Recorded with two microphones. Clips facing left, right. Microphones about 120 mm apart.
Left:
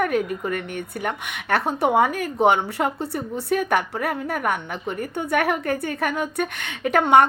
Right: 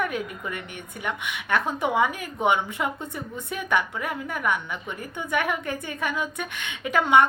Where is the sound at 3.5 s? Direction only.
55° left (ahead or behind).